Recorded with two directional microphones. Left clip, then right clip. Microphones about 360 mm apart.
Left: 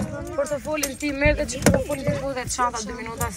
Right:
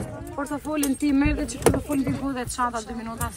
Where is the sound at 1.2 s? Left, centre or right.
Right.